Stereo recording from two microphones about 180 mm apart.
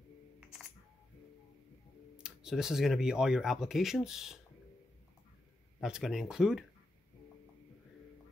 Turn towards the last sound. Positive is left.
turn(degrees=-5)  # may be behind; listen again after turning